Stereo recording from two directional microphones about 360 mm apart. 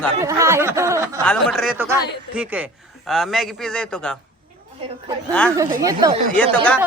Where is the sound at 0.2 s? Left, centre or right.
Centre.